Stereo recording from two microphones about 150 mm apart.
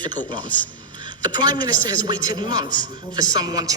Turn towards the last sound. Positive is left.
turn(degrees=-25)  # may be behind; listen again after turning